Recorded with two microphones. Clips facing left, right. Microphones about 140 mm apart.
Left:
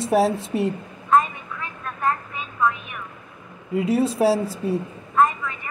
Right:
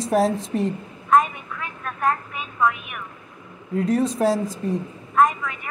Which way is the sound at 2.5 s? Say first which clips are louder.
Right 1 dB; 10° right (ahead or behind).